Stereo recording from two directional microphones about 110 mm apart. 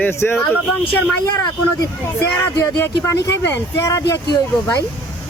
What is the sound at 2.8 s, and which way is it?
Speech, 25° left (ahead or behind).